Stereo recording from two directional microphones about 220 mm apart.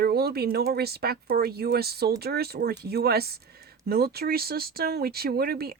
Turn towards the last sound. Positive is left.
turn(degrees=-45)  # may be behind; listen again after turning